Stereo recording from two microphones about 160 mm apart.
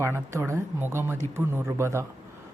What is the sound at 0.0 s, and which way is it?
Speech, 15° right (ahead or behind).